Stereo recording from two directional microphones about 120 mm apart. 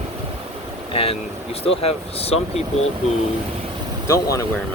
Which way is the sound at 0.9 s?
55° left (ahead or behind).